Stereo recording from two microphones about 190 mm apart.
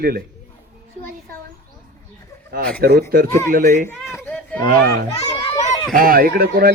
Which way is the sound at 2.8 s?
55° right (ahead or behind).